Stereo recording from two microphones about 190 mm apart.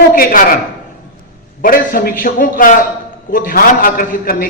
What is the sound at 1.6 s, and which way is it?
A man's voice, 50° left (ahead or behind).